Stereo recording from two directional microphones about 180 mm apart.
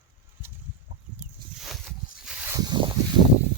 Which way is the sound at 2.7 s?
30° right (ahead or behind).